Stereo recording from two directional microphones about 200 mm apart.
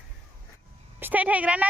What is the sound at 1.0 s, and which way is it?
Speech, 10° right (ahead or behind).